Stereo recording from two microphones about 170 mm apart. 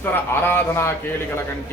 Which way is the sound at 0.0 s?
10° left (ahead or behind).